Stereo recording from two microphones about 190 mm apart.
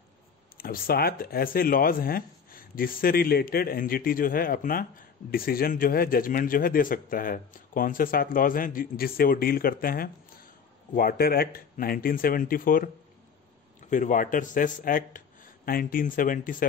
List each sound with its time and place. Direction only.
0.6 s speech: 50° left (ahead or behind)